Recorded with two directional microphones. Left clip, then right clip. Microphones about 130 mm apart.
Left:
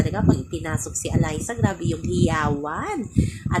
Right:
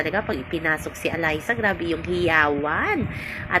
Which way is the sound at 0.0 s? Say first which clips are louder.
Even; 20° left (ahead or behind).